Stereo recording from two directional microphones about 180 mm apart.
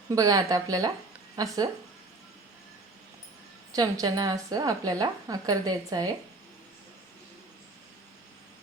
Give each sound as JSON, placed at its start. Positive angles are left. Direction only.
{"t": 0.1, "sound": "a woman's voice", "side_deg": -20}
{"t": 3.7, "sound": "a woman's voice", "side_deg": -20}